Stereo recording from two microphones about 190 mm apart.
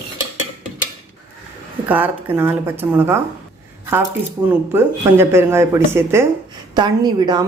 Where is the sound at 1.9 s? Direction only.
10° right (ahead or behind).